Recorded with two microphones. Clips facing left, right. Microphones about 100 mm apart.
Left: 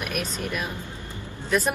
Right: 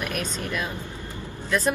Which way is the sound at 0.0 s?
15° left (ahead or behind).